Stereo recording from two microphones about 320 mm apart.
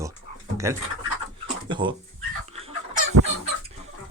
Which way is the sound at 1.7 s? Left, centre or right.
Centre.